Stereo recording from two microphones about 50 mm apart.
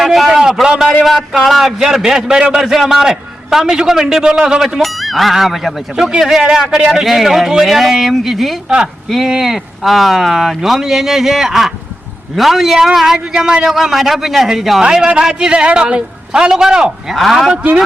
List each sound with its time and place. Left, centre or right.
0.0 s a sound: centre
1.0 s a man's voice: centre
4.8 s a man's voice: centre
13.7 s speech: centre
14.8 s a man's voice: centre
17.2 s speech: centre
17.5 s speech: right